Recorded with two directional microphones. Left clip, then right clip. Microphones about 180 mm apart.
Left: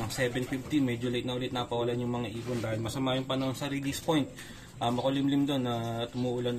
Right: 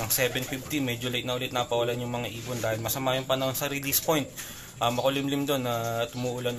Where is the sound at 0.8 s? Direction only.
5° left (ahead or behind).